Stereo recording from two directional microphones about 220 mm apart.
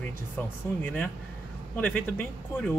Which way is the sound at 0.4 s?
10° left (ahead or behind).